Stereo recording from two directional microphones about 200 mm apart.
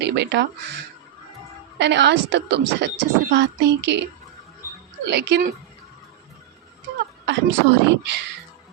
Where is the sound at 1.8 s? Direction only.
60° right (ahead or behind).